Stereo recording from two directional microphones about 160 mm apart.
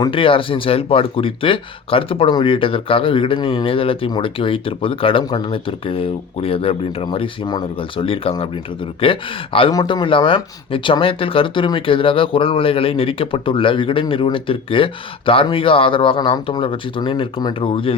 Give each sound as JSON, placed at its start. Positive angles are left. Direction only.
{"t": 0.0, "sound": "speech", "side_deg": 35}